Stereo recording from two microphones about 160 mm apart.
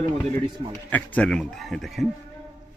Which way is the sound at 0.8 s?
10° left (ahead or behind).